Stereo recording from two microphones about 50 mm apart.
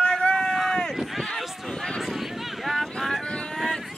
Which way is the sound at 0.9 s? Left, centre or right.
Centre.